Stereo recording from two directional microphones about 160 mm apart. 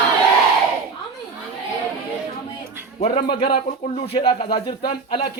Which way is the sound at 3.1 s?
80° left.